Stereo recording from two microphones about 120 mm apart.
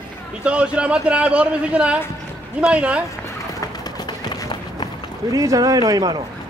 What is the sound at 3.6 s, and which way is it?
Run, 35° left (ahead or behind).